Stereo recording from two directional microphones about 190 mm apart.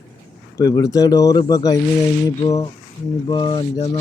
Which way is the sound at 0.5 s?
15° left (ahead or behind).